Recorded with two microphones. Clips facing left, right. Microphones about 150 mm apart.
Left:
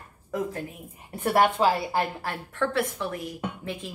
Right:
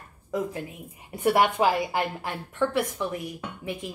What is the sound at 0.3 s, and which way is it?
Speech, 15° right (ahead or behind).